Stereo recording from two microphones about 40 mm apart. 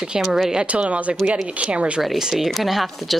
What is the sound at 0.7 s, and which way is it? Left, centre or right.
A woman's voice, right.